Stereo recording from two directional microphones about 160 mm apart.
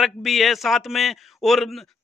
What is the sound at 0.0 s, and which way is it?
A man's voice, centre (ahead or behind).